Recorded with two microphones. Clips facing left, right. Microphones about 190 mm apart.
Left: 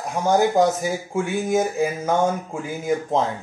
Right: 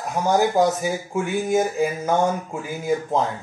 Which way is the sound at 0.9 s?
15° left (ahead or behind).